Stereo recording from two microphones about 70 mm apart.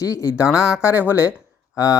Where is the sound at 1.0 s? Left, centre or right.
Left.